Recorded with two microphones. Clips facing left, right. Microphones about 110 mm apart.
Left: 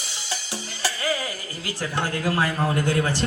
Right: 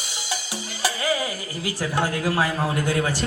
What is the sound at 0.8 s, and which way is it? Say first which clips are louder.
Music: right 3 dB; 15° right (ahead or behind).